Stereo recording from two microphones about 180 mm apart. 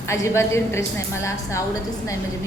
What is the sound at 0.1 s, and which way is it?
A woman's voice, 15° left (ahead or behind).